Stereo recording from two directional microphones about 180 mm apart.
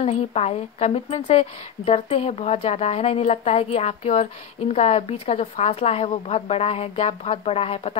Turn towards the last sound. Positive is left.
turn(degrees=35)  # may be behind; listen again after turning